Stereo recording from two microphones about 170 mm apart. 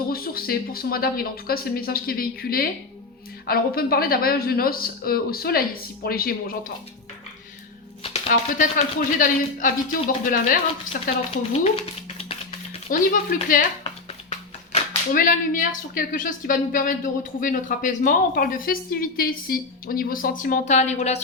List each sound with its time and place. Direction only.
0.1 s a woman's voice: 60° left (ahead or behind)
8.0 s typewriter: 35° left (ahead or behind)
8.3 s a woman's voice: 55° left (ahead or behind)
11.5 s a sound: 35° left (ahead or behind)
12.9 s a woman's voice: 55° left (ahead or behind)
13.8 s a sound: 35° left (ahead or behind)
15.1 s a woman's voice: 55° left (ahead or behind)